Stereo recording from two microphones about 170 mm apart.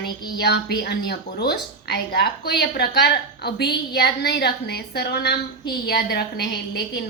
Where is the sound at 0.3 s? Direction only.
75° left (ahead or behind).